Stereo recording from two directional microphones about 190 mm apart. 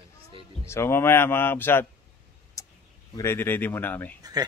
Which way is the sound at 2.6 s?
15° left (ahead or behind).